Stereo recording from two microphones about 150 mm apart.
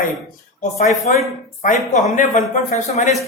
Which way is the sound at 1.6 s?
55° left (ahead or behind).